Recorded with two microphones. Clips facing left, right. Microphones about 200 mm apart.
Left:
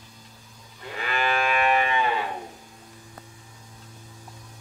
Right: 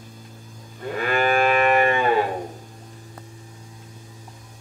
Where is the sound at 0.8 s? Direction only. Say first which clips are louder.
Right 6 dB; 50° right (ahead or behind).